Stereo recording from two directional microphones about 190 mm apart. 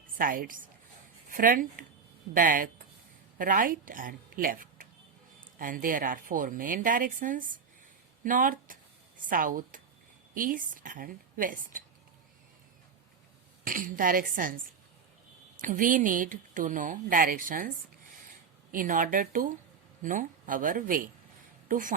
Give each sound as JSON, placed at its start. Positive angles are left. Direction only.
{"t": 0.2, "sound": "speech", "side_deg": -45}
{"t": 13.7, "sound": "speech", "side_deg": -45}
{"t": 15.6, "sound": "speech", "side_deg": -45}
{"t": 18.7, "sound": "speech", "side_deg": -45}